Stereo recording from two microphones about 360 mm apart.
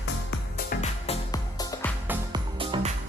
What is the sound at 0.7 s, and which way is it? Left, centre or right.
Music, centre.